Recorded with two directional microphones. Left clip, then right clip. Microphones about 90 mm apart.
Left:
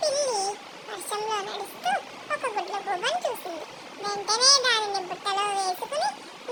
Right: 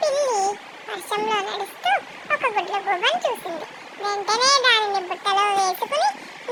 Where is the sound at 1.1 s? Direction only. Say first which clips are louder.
Right 6 dB; 25° right (ahead or behind).